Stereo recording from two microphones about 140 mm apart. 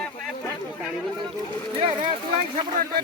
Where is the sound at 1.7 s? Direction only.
40° right (ahead or behind).